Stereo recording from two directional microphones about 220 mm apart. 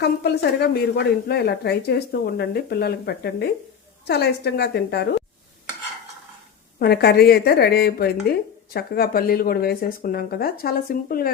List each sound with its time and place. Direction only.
0.0 s a woman's voice: 45° left (ahead or behind)
6.7 s a woman's voice: 45° left (ahead or behind)